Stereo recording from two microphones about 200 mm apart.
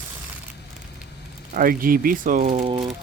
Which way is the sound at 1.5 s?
45° right (ahead or behind).